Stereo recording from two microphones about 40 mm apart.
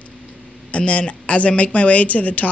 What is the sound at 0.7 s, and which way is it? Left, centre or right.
A man's voice, left.